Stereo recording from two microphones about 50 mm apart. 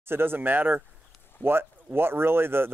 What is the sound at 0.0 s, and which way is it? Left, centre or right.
Speech, right.